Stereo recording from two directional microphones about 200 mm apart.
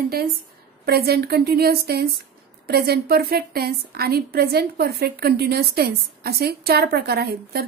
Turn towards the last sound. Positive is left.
turn(degrees=-50)  # may be behind; listen again after turning